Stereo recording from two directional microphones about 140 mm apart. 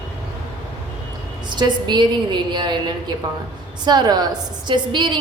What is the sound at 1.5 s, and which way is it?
A woman's voice, 30° right (ahead or behind).